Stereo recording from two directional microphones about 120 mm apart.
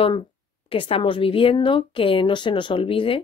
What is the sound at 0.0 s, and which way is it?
A woman's voice, 45° left (ahead or behind).